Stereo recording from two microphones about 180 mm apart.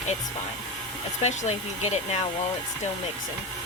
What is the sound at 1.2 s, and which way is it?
Speech, 40° left (ahead or behind).